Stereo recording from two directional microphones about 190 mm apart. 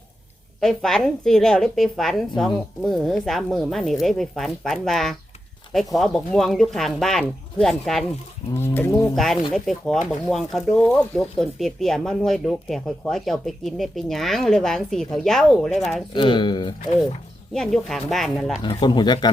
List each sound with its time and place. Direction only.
0.6 s speech: centre (ahead or behind)
8.7 s speech: 10° left (ahead or behind)
9.1 s speech: centre (ahead or behind)
16.1 s speech: 25° left (ahead or behind)
17.5 s speech: centre (ahead or behind)
18.6 s speech: 25° left (ahead or behind)